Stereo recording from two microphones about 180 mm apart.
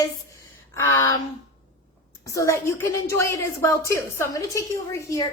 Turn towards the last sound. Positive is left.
turn(degrees=15)  # may be behind; listen again after turning